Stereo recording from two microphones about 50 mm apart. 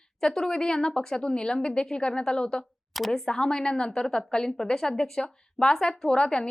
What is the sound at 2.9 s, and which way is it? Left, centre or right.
Speech, centre.